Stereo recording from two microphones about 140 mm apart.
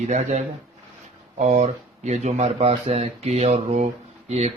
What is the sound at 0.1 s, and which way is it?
Speech, 55° right (ahead or behind).